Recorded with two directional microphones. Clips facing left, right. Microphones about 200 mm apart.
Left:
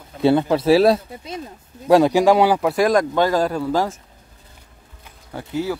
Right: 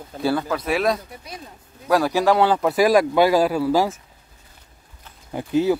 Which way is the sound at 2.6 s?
Centre (ahead or behind).